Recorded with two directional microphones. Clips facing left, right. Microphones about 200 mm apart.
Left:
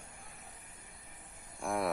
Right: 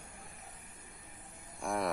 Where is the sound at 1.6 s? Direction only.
Centre (ahead or behind).